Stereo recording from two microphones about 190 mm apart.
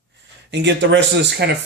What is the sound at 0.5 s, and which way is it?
Speech, 65° right (ahead or behind).